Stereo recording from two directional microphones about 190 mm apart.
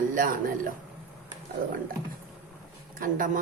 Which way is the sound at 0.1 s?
45° right (ahead or behind).